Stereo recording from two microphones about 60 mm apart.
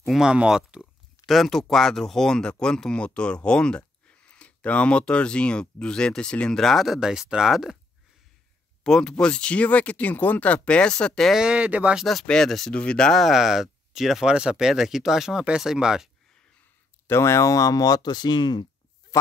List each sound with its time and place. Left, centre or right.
0.1 s speech: centre
1.2 s speech: centre
6.5 s speech: centre
7.0 s speech: centre
8.8 s speech: centre
11.3 s speech: centre
11.6 s speech: right
12.3 s speech: centre
13.2 s speech: centre
14.3 s speech: centre
17.1 s speech: left